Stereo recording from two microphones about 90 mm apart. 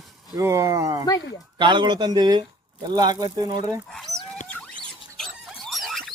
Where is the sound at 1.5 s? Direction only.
60° right (ahead or behind).